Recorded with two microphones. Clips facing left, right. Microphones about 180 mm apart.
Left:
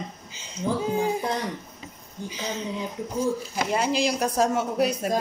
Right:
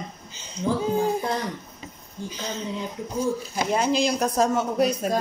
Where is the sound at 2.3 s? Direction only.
10° left (ahead or behind).